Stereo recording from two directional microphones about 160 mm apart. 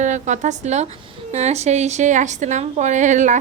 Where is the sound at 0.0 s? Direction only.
50° right (ahead or behind).